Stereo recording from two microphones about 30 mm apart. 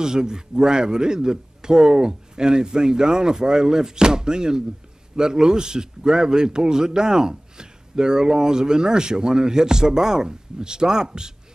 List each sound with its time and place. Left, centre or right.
0.0 s a man's voice: right